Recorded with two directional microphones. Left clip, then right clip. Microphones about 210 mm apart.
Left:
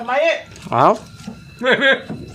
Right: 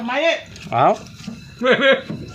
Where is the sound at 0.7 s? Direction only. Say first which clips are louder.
Left 2 dB; 25° left (ahead or behind).